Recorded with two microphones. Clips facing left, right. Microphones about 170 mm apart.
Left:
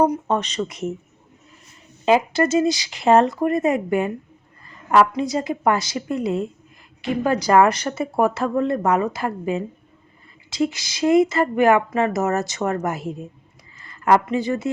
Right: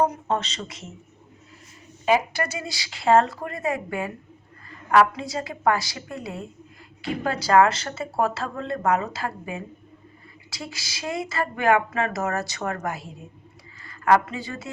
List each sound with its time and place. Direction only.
0.0 s speech: 15° left (ahead or behind)
2.3 s speech: 25° left (ahead or behind)